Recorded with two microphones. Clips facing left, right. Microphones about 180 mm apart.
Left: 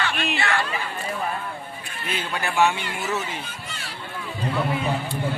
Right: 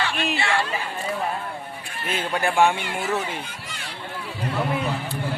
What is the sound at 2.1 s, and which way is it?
Speech, 50° right (ahead or behind).